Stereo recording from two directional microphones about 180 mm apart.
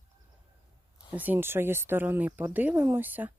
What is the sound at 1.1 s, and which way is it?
Speech, 10° right (ahead or behind).